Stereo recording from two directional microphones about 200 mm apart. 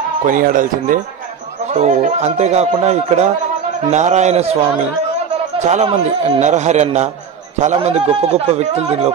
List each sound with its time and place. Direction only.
0.2 s a man's voice: 40° right (ahead or behind)
5.6 s a man's voice: 35° right (ahead or behind)